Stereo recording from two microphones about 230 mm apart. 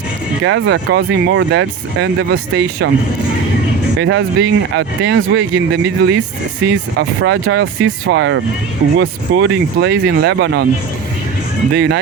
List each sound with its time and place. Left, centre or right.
0.4 s speech: right
4.0 s speech: right
7.2 s speech: right
11.7 s speech: right